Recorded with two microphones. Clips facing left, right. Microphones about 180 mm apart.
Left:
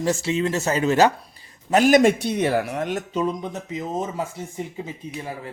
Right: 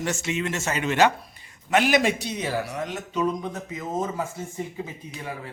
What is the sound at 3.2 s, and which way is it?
Speech, 20° left (ahead or behind).